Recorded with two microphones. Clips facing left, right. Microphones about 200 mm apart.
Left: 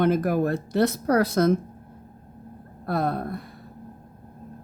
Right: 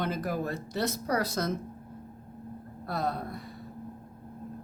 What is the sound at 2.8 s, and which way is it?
Speech, 55° left (ahead or behind).